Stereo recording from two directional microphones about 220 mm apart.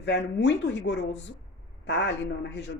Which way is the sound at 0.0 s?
50° left (ahead or behind).